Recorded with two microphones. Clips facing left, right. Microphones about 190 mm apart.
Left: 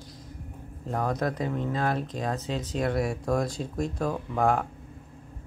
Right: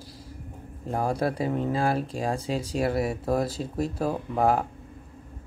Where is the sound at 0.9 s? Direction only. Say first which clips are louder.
Right 2 dB; 10° right (ahead or behind).